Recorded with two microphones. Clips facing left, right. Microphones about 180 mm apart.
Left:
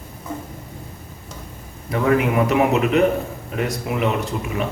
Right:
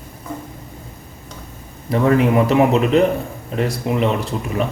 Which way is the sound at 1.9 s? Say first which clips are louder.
Right 3 dB; 30° right (ahead or behind).